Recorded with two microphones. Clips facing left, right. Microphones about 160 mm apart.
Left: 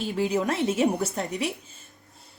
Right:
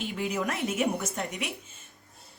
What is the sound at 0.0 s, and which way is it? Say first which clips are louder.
Speech: left 5 dB; 35° left (ahead or behind).